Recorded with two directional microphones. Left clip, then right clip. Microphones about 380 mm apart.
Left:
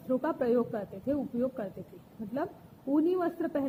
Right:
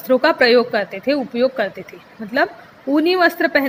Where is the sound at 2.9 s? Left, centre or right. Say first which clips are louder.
Right 14 dB; right.